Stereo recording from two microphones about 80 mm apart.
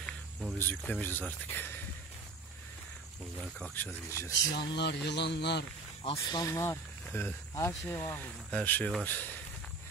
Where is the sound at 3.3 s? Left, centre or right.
Centre.